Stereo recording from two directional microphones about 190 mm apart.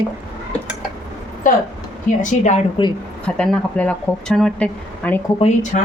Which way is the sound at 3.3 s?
5° left (ahead or behind).